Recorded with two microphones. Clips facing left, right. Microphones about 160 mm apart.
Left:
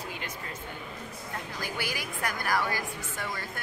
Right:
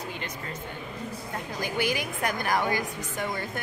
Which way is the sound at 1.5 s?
20° right (ahead or behind).